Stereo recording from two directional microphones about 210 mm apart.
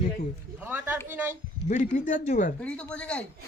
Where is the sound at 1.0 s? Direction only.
10° right (ahead or behind).